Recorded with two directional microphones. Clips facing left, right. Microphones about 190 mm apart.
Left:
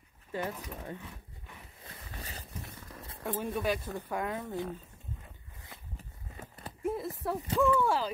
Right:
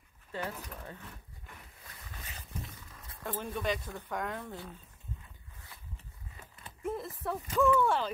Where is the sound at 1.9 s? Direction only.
35° left (ahead or behind).